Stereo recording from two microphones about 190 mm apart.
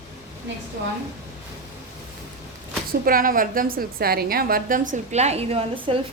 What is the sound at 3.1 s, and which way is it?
A woman's voice, 50° right (ahead or behind).